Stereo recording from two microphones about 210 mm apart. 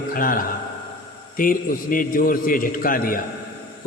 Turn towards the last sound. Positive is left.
turn(degrees=40)  # may be behind; listen again after turning